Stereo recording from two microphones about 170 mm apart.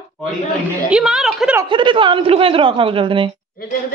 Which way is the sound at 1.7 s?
30° right (ahead or behind).